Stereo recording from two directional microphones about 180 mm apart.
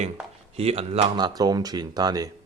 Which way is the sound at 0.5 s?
35° right (ahead or behind).